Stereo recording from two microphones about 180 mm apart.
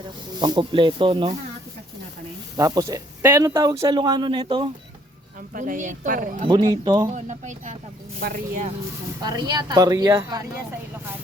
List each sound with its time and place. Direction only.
0.3 s speech: 25° right (ahead or behind)
2.6 s speech: 20° right (ahead or behind)
5.5 s speech: 45° right (ahead or behind)
6.5 s speech: 25° right (ahead or behind)
7.1 s speech: 40° right (ahead or behind)
8.2 s speech: 60° right (ahead or behind)
9.2 s speech: 20° right (ahead or behind)